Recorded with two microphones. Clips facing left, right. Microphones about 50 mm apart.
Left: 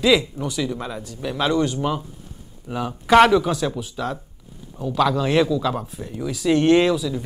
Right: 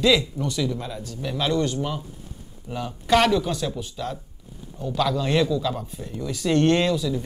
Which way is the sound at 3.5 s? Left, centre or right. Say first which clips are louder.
Left 4 dB; centre.